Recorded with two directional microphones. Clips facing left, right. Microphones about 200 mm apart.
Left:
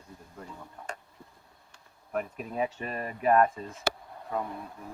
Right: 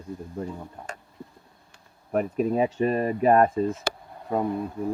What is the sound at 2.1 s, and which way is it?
Speech, 35° right (ahead or behind).